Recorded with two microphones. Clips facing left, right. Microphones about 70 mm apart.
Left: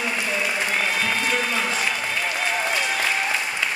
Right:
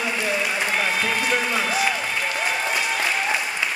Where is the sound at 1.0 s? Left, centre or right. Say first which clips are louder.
Right 1 dB; centre.